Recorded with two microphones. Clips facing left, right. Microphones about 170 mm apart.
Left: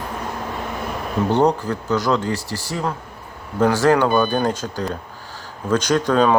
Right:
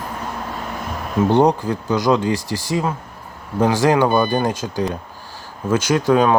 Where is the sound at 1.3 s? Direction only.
15° right (ahead or behind).